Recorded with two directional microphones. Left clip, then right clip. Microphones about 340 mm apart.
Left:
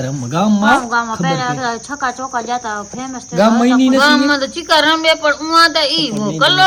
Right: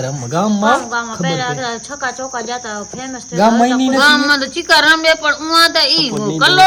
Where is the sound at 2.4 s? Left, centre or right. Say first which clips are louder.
Left 3 dB; left.